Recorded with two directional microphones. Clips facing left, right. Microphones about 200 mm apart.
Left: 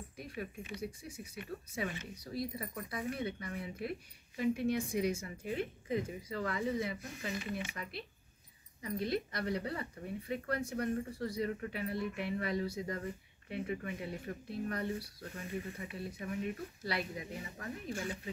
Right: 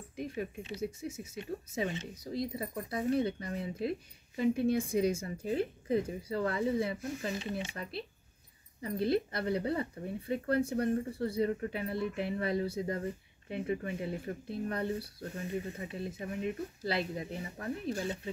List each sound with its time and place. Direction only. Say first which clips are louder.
0.1 s a woman's voice: right 8 dB; 20° right (ahead or behind)